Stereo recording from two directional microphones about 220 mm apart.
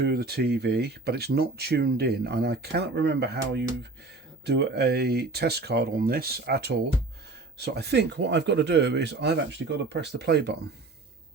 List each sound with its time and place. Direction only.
0.0 s speech: 45° right (ahead or behind)